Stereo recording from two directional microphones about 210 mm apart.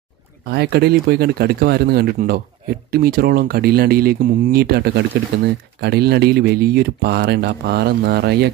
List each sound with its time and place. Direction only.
0.5 s speech: 50° right (ahead or behind)